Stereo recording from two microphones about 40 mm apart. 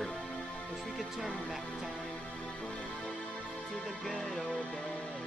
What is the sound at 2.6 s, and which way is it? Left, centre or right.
Music, left.